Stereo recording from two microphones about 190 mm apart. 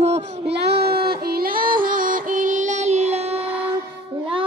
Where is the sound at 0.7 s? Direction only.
55° right (ahead or behind).